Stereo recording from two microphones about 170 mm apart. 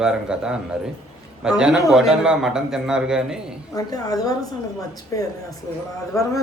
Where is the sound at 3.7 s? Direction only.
20° left (ahead or behind).